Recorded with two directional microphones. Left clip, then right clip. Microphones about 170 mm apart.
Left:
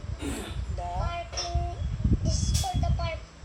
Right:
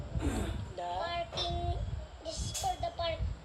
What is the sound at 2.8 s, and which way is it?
Speech, 30° right (ahead or behind).